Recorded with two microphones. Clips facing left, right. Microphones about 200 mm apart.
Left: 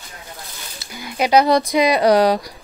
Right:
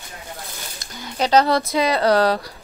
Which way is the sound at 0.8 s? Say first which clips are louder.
Left 2 dB; 10° left (ahead or behind).